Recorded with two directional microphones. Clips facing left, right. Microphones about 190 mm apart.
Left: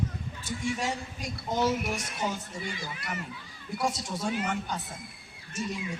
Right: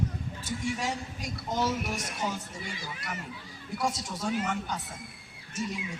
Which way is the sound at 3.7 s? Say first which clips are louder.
Left 1 dB; 5° left (ahead or behind).